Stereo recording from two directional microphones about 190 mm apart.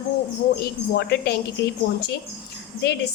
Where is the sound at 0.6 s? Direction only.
55° left (ahead or behind).